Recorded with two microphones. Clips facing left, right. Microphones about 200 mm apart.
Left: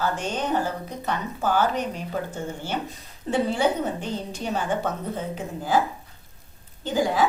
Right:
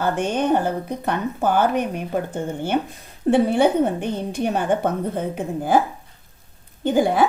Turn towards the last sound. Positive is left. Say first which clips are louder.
# right 5 dB
turn(degrees=-60)  # may be behind; listen again after turning